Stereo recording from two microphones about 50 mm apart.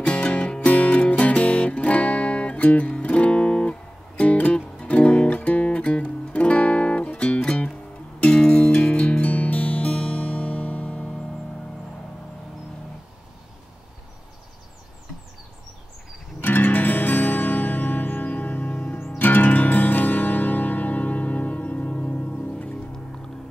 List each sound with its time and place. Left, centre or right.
0.0 s music: left
16.3 s music: left